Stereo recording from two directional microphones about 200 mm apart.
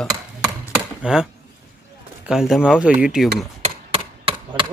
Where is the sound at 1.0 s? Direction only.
5° right (ahead or behind).